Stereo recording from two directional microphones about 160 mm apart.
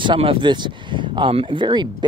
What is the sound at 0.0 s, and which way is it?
Speech, 35° right (ahead or behind).